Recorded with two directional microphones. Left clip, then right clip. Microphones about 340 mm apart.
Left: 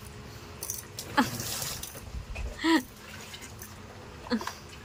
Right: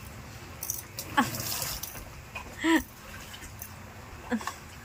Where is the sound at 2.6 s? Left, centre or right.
Centre.